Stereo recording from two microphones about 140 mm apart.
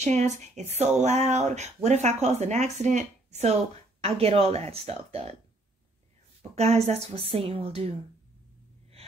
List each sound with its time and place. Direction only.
0.0 s a woman's voice: 55° right (ahead or behind)
6.5 s a woman's voice: 50° right (ahead or behind)